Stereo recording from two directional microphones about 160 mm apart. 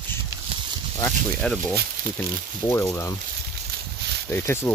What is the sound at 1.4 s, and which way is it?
Speech, 5° left (ahead or behind).